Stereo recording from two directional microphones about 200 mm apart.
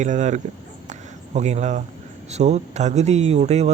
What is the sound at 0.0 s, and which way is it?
Speech, 35° right (ahead or behind).